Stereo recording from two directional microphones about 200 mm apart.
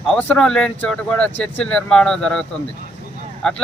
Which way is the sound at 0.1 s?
5° left (ahead or behind).